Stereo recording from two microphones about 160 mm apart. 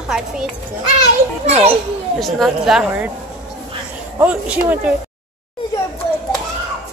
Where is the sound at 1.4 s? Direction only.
40° right (ahead or behind).